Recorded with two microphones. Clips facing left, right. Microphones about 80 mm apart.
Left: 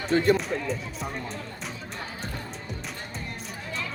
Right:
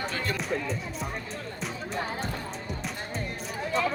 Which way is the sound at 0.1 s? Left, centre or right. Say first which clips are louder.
Left 11 dB; left.